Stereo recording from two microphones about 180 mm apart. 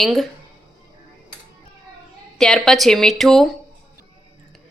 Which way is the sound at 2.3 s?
Centre (ahead or behind).